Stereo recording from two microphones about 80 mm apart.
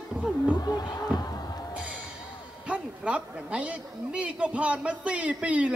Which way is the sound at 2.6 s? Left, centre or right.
Centre.